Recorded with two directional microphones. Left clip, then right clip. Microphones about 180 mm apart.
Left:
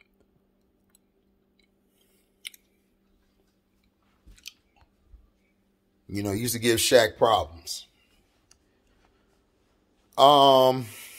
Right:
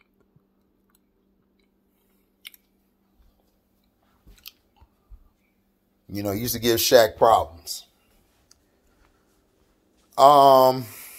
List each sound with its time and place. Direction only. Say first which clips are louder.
6.0 s speech: right 2 dB; 5° left (ahead or behind)
7.2 s speech: right 4 dB; 15° left (ahead or behind)
10.1 s speech: right 3 dB; 15° left (ahead or behind)